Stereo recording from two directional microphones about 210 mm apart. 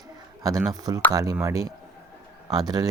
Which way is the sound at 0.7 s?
15° right (ahead or behind).